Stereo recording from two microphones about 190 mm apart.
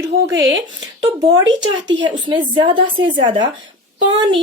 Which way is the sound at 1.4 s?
20° right (ahead or behind).